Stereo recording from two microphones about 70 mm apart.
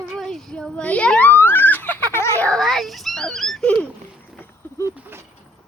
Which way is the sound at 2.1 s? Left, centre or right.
Left.